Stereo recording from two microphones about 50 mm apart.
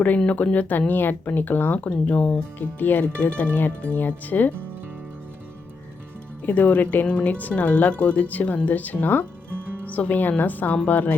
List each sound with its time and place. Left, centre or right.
0.3 s speech: left
2.0 s speech: left
2.6 s speech: left
4.0 s speech: left
6.4 s speech: left